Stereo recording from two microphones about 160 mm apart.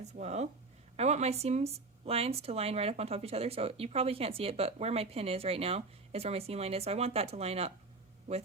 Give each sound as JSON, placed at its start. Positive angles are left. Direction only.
{"t": 0.0, "sound": "speech", "side_deg": -45}